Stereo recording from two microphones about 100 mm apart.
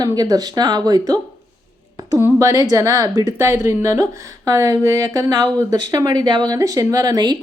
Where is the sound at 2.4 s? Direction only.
40° right (ahead or behind).